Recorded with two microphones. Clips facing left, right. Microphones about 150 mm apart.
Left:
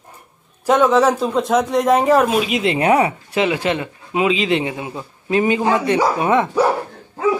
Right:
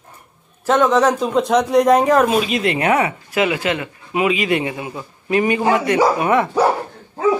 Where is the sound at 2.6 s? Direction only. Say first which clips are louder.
Left 5 dB; 30° left (ahead or behind).